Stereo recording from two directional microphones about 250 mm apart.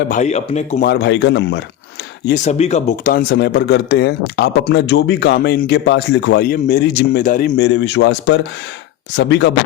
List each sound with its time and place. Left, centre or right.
0.1 s speech: left
0.9 s speech: left
2.2 s speech: left
7.7 s speech: left